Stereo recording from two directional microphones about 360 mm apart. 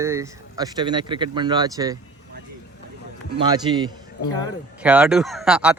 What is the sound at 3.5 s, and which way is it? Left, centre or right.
Speech, centre.